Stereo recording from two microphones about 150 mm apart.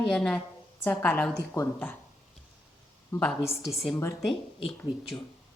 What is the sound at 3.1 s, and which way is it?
Speech, 15° left (ahead or behind).